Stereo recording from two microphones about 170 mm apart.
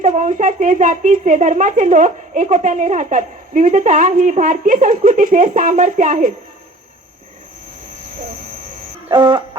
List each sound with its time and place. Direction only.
0.0 s a woman's voice: 50° right (ahead or behind)
9.0 s chicken: 25° right (ahead or behind)